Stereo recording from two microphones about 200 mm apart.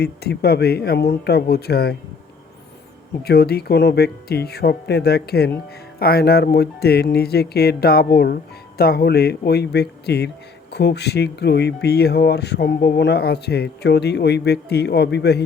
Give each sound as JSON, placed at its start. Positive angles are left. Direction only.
{"t": 0.0, "sound": "speech", "side_deg": 55}
{"t": 3.2, "sound": "speech", "side_deg": 50}